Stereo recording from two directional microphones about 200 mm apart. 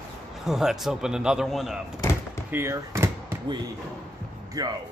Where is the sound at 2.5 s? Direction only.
10° right (ahead or behind).